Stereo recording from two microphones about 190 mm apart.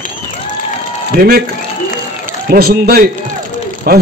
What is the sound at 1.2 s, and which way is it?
Speech, 50° right (ahead or behind).